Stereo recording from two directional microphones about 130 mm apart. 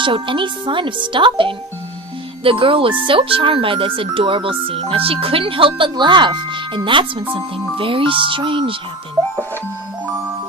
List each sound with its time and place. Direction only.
0.0 s speech: 40° right (ahead or behind)